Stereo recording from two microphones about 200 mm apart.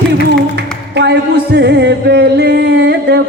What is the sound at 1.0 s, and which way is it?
Music, 55° right (ahead or behind).